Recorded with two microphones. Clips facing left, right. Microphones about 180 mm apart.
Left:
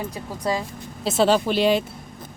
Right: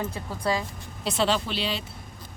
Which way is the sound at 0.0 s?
20° left (ahead or behind).